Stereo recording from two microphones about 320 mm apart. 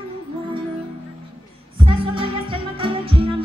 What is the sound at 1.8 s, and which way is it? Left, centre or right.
Music, centre.